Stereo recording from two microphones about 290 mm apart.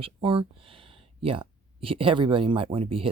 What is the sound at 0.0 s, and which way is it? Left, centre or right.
Speech, centre.